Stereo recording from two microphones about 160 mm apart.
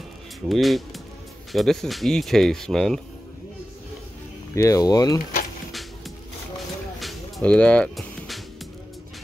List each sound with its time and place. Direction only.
0.5 s speech: centre (ahead or behind)
4.6 s speech: 20° left (ahead or behind)
5.7 s music: centre (ahead or behind)